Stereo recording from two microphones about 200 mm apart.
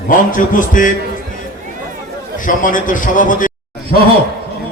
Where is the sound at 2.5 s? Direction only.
40° left (ahead or behind).